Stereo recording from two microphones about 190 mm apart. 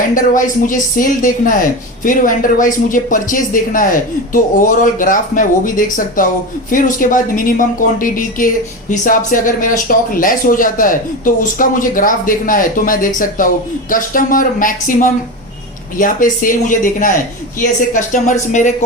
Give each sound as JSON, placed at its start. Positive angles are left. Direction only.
{"t": 0.1, "sound": "speech", "side_deg": 45}